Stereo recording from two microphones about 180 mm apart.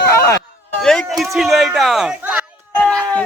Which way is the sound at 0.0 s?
15° left (ahead or behind).